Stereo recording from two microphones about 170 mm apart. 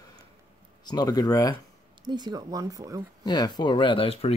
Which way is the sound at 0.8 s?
25° left (ahead or behind).